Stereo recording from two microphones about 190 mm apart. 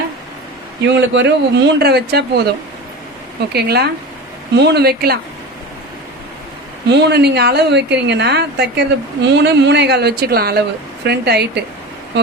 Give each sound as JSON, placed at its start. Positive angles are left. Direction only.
{"t": 0.9, "sound": "a woman's voice", "side_deg": -65}
{"t": 3.5, "sound": "a woman's voice", "side_deg": -60}
{"t": 6.8, "sound": "a woman's voice", "side_deg": -60}